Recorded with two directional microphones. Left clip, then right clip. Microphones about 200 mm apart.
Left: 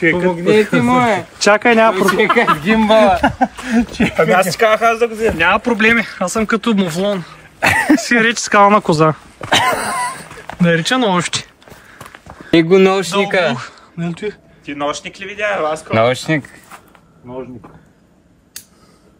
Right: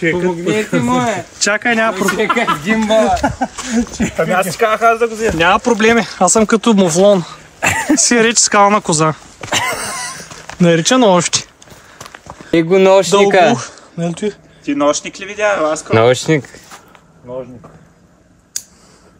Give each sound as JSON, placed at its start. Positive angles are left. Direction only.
{"t": 0.0, "sound": "speech", "side_deg": 10}
{"t": 3.2, "sound": "speech", "side_deg": 30}
{"t": 4.2, "sound": "speech", "side_deg": 5}
{"t": 7.6, "sound": "speech", "side_deg": 5}
{"t": 8.0, "sound": "speech", "side_deg": -10}
{"t": 9.5, "sound": "a sound", "side_deg": 35}
{"t": 10.6, "sound": "speech", "side_deg": -15}
{"t": 12.0, "sound": "a sound", "side_deg": -5}
{"t": 13.0, "sound": "speech", "side_deg": -30}
{"t": 13.3, "sound": "speech", "side_deg": -50}
{"t": 13.6, "sound": "speech", "side_deg": -15}
{"t": 15.9, "sound": "speech", "side_deg": -55}